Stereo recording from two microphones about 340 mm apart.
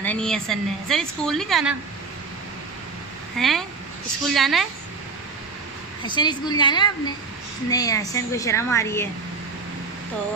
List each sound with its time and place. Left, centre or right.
0.0 s a woman's voice: centre
3.3 s a woman's voice: centre
6.0 s speech: centre